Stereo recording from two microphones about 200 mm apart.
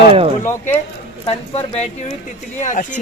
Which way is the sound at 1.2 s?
30° left (ahead or behind).